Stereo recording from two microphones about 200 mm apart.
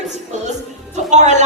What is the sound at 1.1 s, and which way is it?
Speech, 35° right (ahead or behind).